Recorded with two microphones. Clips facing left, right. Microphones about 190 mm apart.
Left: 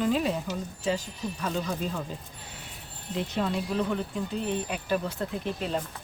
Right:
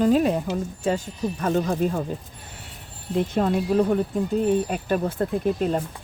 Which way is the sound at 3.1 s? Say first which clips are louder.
Right 7 dB; 50° right (ahead or behind).